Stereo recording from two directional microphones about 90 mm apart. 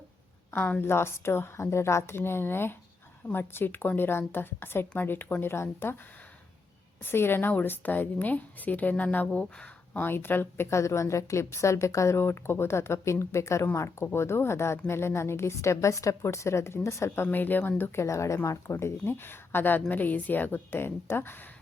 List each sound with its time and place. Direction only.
0.5 s a woman's voice: 20° left (ahead or behind)
7.0 s a woman's voice: 25° left (ahead or behind)
18.0 s a woman's voice: 35° left (ahead or behind)